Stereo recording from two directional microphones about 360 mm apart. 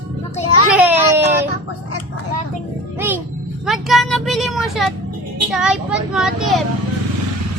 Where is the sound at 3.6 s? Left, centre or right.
Centre.